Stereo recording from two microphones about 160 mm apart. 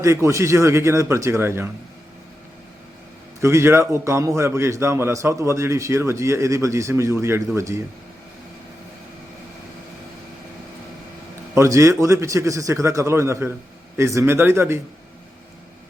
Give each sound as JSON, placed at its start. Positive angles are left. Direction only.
{"t": 0.0, "sound": "a man's voice", "side_deg": -15}
{"t": 3.4, "sound": "a man's voice", "side_deg": -15}
{"t": 11.5, "sound": "a man's voice", "side_deg": -20}